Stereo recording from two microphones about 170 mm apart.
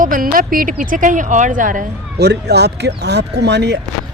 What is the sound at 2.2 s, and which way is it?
Speech, 75° right (ahead or behind).